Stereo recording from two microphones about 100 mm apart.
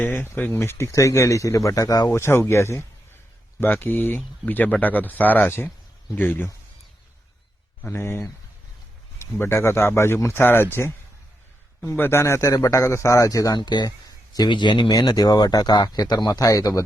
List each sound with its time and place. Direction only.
0.0 s speech: 20° left (ahead or behind); by 2.0 s 35° left (ahead or behind)
2.0 s speech: 25° left (ahead or behind)
7.8 s speech: 25° left (ahead or behind)
13.6 s speech: 50° left (ahead or behind)